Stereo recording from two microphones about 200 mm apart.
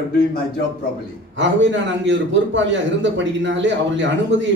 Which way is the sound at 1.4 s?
65° right (ahead or behind).